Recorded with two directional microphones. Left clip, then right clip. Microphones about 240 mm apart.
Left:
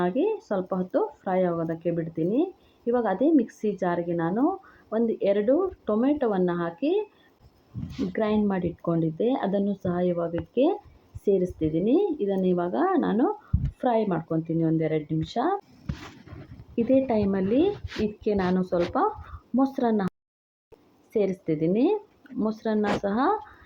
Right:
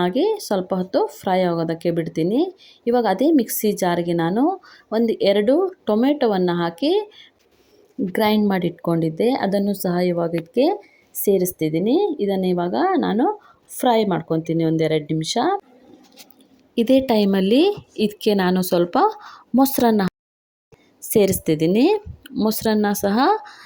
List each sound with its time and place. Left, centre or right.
0.0 s speech: right
8.1 s speech: right
16.7 s speech: right
21.1 s speech: right